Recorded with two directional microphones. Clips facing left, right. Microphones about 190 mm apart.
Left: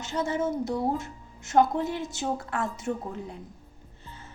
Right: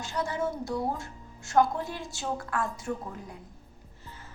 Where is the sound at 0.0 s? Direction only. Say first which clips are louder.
Left 3 dB; 25° left (ahead or behind).